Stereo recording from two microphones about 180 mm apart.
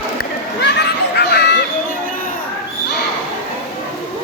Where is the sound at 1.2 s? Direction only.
65° left (ahead or behind).